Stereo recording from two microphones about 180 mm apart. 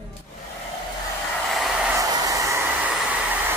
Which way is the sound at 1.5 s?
Centre (ahead or behind).